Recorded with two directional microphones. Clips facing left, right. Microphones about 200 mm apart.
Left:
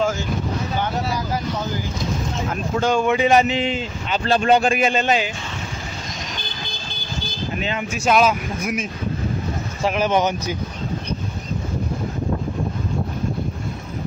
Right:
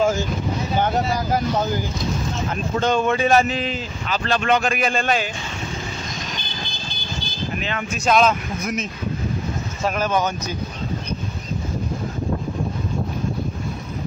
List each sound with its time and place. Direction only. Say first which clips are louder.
2.5 s speech: left 1 dB; 10° left (ahead or behind)
3.5 s speech: left 3 dB; 25° left (ahead or behind)
7.5 s speech: left 2 dB; 25° left (ahead or behind)
7.9 s speech: even; 10° left (ahead or behind)
9.8 s speech: left 2 dB; 15° left (ahead or behind)